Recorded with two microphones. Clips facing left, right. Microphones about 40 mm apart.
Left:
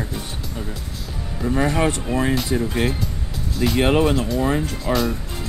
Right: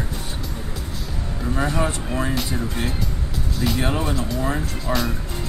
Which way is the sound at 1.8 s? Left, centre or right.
Left.